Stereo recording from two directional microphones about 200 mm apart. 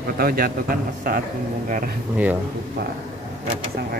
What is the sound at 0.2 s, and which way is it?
Speech, 45° right (ahead or behind).